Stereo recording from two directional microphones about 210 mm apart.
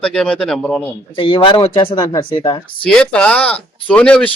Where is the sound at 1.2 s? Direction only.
25° left (ahead or behind).